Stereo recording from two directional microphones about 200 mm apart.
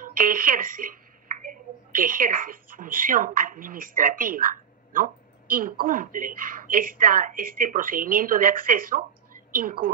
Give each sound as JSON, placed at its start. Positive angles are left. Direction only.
{"t": 0.0, "sound": "a woman's voice", "side_deg": -45}